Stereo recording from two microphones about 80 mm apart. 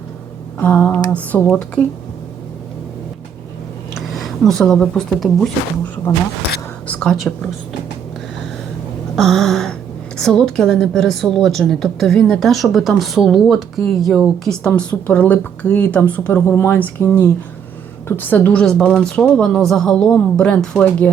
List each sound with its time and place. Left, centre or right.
0.6 s speech: centre
3.9 s speech: centre
7.0 s speech: centre
9.1 s a sound: centre
10.2 s a woman's voice: centre
14.6 s speech: centre; by 16.7 s left
16.7 s speech: centre
18.5 s speech: centre